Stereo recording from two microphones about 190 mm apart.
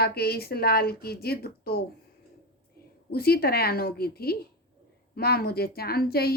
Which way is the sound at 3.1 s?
55° left (ahead or behind).